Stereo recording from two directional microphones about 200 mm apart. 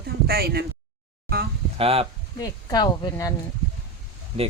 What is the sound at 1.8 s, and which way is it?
Speech, 30° right (ahead or behind).